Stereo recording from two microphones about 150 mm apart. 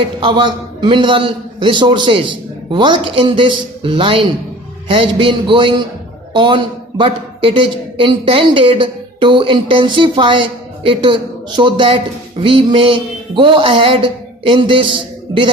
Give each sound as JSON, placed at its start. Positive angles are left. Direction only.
{"t": 0.0, "sound": "a man's voice", "side_deg": -35}